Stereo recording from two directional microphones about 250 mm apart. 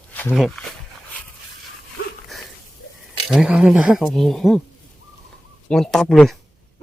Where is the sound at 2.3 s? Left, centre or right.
Centre.